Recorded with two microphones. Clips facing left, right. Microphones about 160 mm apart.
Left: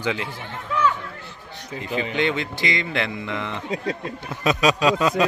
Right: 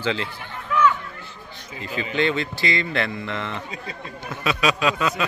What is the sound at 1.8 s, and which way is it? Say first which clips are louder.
Speech: even; 20° left (ahead or behind).